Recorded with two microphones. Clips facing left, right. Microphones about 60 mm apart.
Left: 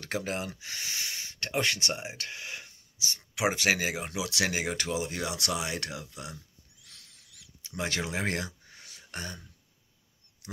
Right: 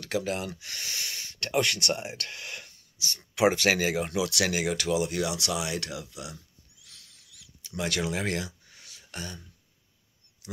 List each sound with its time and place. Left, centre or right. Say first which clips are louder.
0.0 s speech: right 3 dB; left
0.6 s speech: even; centre
8.4 s a sound: right 1 dB; left
10.4 s speech: right 2 dB; left